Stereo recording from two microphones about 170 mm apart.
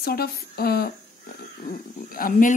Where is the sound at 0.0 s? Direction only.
65° left (ahead or behind).